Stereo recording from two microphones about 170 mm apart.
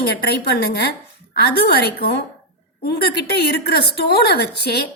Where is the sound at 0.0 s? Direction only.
70° left (ahead or behind).